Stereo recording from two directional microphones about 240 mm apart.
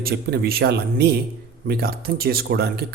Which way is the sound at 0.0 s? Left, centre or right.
Right.